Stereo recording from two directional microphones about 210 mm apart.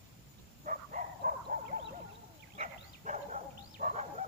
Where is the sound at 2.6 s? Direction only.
35° right (ahead or behind).